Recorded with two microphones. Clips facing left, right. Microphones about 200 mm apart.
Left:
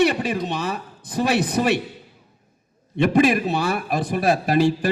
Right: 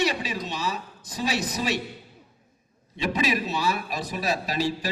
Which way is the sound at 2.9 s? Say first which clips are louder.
Left 9 dB; 55° left (ahead or behind).